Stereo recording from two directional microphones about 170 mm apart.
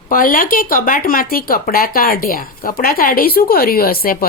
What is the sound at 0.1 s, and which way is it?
Speech, 55° left (ahead or behind).